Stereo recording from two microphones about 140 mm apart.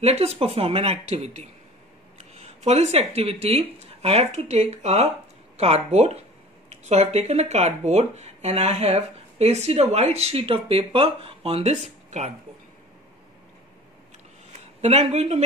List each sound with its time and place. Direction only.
0.0 s speech: 50° right (ahead or behind)
14.8 s speech: 50° right (ahead or behind)